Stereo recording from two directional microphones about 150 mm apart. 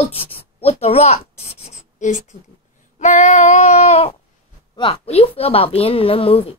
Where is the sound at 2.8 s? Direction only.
50° left (ahead or behind).